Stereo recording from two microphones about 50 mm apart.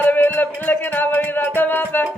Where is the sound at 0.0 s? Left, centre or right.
Left.